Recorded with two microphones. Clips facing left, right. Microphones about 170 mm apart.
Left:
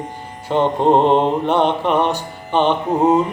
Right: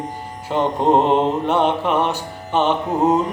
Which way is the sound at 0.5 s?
Centre (ahead or behind).